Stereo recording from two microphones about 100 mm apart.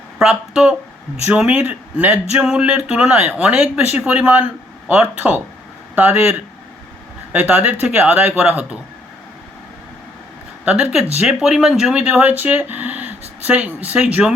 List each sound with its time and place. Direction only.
0.2 s speech: 5° right (ahead or behind)
7.3 s speech: 15° right (ahead or behind)
10.7 s speech: 10° right (ahead or behind)